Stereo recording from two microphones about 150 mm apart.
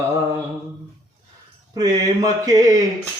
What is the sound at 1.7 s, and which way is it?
Speech, 25° right (ahead or behind).